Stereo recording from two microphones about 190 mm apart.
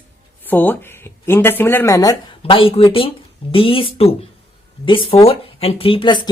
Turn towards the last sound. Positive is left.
turn(degrees=25)  # may be behind; listen again after turning